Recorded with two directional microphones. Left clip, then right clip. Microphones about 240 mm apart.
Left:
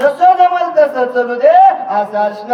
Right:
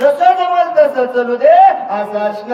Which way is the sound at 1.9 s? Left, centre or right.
Left.